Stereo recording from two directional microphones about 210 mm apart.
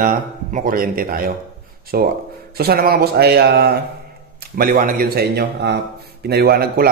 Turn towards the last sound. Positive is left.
turn(degrees=-45)  # may be behind; listen again after turning